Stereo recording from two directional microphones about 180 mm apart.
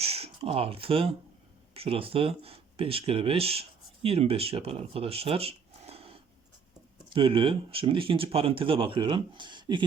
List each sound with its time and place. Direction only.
0.0 s speech: 35° right (ahead or behind)